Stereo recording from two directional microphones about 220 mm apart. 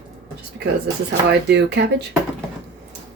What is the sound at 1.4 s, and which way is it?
Speech, 50° right (ahead or behind).